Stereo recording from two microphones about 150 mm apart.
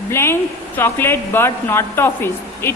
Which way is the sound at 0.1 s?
15° left (ahead or behind).